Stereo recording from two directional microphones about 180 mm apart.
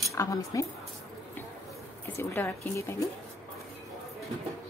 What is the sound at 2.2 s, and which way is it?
Speech, 10° left (ahead or behind).